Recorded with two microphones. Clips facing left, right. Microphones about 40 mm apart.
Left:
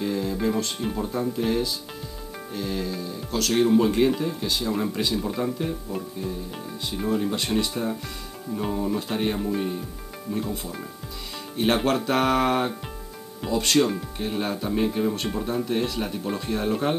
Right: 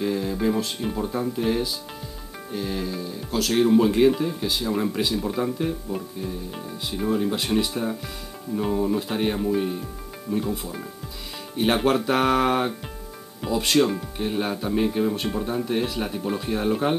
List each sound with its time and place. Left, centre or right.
0.0 s speech: centre